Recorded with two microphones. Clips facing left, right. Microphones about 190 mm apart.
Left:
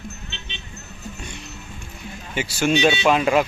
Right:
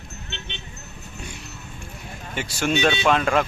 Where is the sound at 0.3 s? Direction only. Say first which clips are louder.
Right 2 dB; 60° right (ahead or behind).